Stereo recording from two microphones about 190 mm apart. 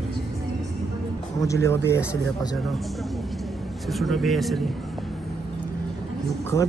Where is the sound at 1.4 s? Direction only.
15° left (ahead or behind).